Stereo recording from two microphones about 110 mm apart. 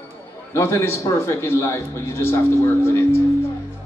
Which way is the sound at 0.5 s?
25° left (ahead or behind).